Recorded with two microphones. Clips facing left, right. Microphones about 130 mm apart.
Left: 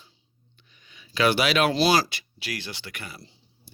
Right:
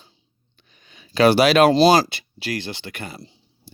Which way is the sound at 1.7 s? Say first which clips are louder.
Right 7 dB; 25° right (ahead or behind).